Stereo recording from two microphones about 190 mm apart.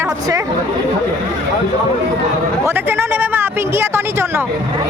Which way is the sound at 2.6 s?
10° right (ahead or behind).